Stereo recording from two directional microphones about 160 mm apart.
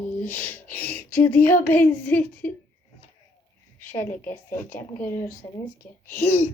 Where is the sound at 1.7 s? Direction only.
10° left (ahead or behind).